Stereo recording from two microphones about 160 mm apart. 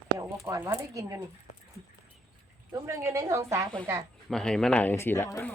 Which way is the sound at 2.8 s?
20° right (ahead or behind).